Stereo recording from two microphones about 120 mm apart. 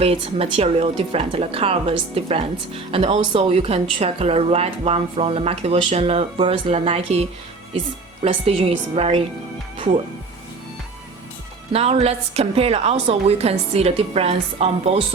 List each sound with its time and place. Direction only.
0.0 s speech: 55° right (ahead or behind)
3.6 s speech: 55° right (ahead or behind)
11.7 s speech: 55° right (ahead or behind)